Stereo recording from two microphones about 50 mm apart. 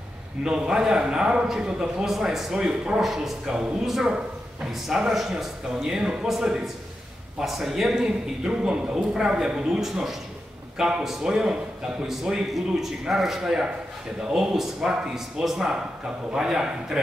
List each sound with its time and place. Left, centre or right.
0.4 s a man's voice: centre
3.0 s a man's voice: centre